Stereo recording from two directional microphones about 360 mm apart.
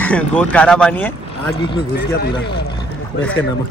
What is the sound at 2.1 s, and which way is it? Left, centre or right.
Speech, left.